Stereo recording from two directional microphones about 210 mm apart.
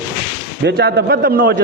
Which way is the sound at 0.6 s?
55° right (ahead or behind).